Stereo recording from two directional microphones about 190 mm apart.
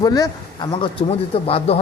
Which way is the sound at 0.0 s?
20° left (ahead or behind).